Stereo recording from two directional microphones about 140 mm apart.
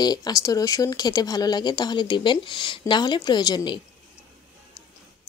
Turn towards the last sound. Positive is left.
turn(degrees=30)  # may be behind; listen again after turning